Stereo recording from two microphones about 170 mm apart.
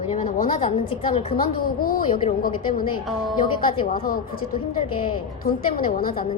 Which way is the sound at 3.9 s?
60° left (ahead or behind).